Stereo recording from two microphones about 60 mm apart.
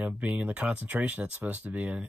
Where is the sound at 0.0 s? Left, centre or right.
Right.